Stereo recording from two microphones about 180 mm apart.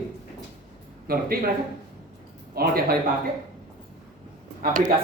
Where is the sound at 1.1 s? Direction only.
55° right (ahead or behind).